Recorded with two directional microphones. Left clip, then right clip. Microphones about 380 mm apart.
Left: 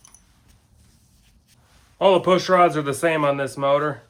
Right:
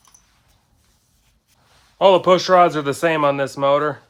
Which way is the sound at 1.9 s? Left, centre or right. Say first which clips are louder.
Right 4 dB; right.